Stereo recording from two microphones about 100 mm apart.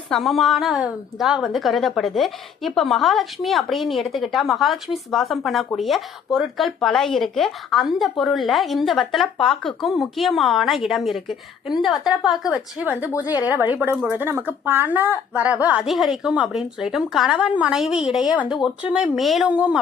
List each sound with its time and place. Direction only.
0.1 s speech: centre (ahead or behind)
12.8 s a woman's voice: 15° right (ahead or behind)
15.9 s a woman's voice: 5° right (ahead or behind)
19.5 s a woman's voice: 15° right (ahead or behind)